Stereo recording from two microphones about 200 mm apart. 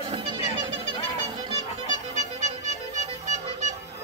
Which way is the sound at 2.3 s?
35° right (ahead or behind).